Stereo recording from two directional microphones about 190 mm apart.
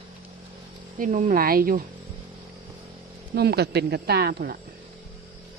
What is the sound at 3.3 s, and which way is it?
Speech, 60° right (ahead or behind).